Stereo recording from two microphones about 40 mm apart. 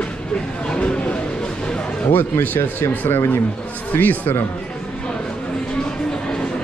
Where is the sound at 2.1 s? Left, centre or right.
Left.